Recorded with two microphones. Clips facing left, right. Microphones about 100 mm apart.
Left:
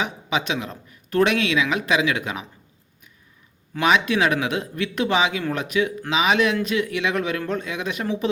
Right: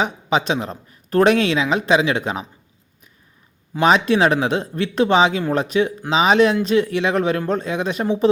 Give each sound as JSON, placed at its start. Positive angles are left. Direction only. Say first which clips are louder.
{"t": 0.0, "sound": "speech", "louder": "right 5 dB", "side_deg": -35}
{"t": 3.8, "sound": "speech", "louder": "right 4 dB", "side_deg": -35}